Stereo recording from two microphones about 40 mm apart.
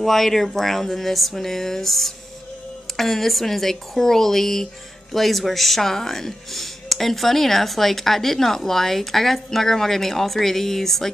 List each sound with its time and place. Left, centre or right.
0.0 s speech: centre